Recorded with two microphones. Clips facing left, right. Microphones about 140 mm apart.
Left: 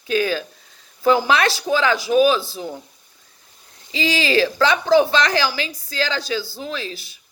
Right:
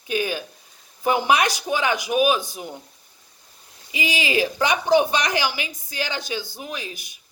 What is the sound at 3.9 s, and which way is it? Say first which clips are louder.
A woman's voice: left 4 dB; 20° right (ahead or behind).